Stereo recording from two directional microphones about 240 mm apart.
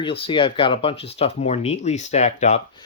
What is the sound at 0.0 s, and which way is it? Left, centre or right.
Speech, left.